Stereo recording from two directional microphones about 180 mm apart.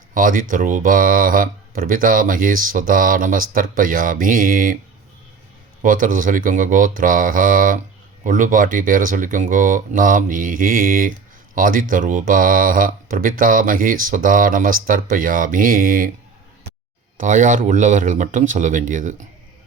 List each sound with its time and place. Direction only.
0.1 s speech: 50° right (ahead or behind)
5.8 s speech: 50° right (ahead or behind)
17.2 s speech: 45° right (ahead or behind)